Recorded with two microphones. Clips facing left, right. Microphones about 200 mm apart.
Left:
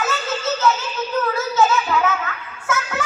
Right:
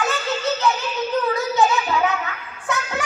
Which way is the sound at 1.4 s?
15° right (ahead or behind).